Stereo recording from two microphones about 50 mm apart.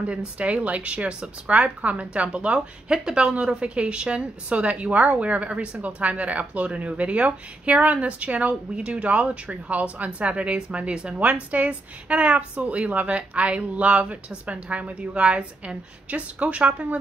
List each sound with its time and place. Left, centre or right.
0.0 s a woman's voice: right